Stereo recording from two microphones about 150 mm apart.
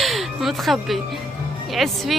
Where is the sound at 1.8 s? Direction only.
Centre (ahead or behind).